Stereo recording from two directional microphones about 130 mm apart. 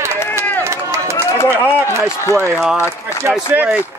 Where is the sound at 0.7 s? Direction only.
20° right (ahead or behind).